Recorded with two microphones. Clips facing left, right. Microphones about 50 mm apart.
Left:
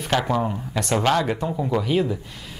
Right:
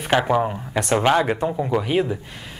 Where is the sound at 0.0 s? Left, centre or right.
Right.